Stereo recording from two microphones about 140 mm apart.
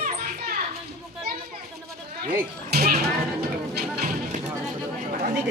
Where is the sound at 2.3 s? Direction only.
90° right.